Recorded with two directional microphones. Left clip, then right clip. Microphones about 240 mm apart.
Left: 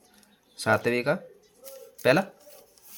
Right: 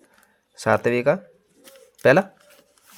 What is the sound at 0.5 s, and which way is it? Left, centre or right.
Speech, right.